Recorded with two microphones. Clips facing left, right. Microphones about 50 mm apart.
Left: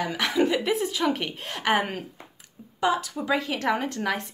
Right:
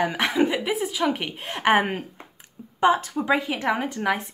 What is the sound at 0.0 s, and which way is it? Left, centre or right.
Speech, right.